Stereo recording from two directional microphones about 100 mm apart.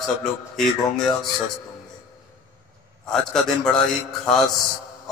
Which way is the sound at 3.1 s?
5° left (ahead or behind).